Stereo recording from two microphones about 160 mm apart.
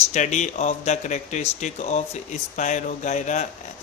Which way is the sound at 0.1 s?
50° left (ahead or behind).